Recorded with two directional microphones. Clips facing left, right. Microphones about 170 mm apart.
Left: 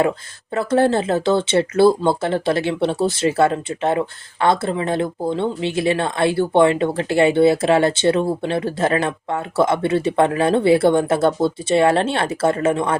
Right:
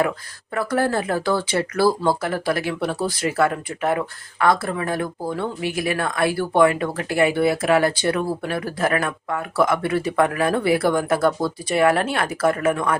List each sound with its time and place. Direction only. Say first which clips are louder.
0.5 s speech: left 5 dB; 25° left (ahead or behind)